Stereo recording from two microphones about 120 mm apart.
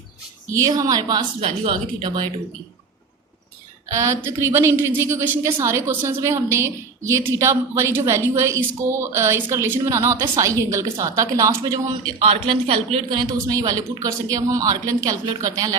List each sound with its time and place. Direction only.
0.5 s speech: 25° right (ahead or behind)
3.9 s a woman's voice: 25° right (ahead or behind)
12.2 s speech: 50° right (ahead or behind)
13.1 s a woman's voice: 35° right (ahead or behind)